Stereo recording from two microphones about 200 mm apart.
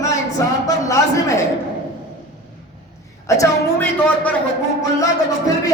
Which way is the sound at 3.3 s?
10° left (ahead or behind).